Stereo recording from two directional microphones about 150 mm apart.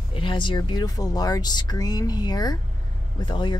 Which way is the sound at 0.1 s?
35° left (ahead or behind).